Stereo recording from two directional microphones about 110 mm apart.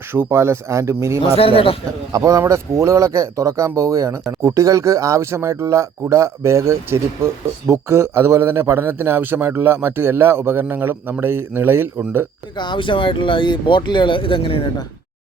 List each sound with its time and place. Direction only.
0.1 s speech: 20° right (ahead or behind)
1.4 s speech: 55° left (ahead or behind)
2.1 s speech: 30° right (ahead or behind)
12.5 s speech: 45° left (ahead or behind)